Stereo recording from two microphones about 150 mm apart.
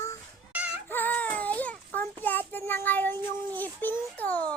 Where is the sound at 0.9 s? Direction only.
10° left (ahead or behind).